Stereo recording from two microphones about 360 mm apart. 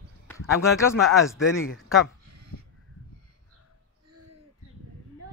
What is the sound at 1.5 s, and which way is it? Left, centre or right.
Speech, left.